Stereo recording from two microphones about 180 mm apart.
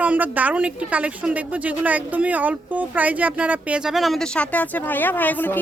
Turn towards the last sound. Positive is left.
turn(degrees=10)  # may be behind; listen again after turning